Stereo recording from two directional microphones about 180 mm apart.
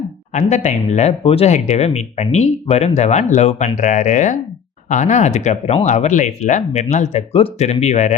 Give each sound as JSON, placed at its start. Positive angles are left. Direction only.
{"t": 0.3, "sound": "speech", "side_deg": 40}